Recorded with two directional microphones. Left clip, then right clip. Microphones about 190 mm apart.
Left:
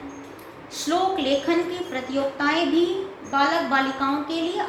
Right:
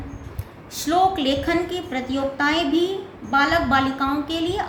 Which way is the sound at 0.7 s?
50° right (ahead or behind).